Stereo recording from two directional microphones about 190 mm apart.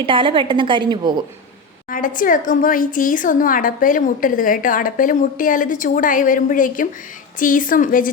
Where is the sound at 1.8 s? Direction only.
45° left (ahead or behind).